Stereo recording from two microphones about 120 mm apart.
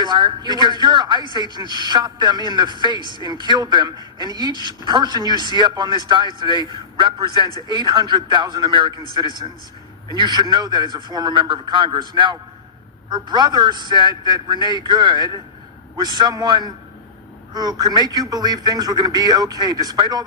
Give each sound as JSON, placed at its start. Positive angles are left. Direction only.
{"t": 0.0, "sound": "a man's voice", "side_deg": -40}